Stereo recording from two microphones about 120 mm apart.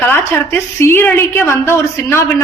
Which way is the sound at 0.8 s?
20° left (ahead or behind).